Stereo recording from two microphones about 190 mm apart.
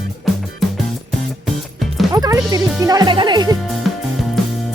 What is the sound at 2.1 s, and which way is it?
Speech, 20° right (ahead or behind).